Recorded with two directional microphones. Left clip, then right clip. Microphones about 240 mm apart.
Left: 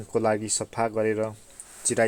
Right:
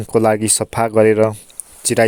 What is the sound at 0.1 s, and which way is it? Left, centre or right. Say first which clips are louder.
Speech: right 10 dB; right.